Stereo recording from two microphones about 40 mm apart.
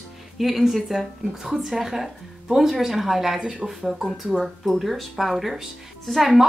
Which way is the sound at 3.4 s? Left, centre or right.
Centre.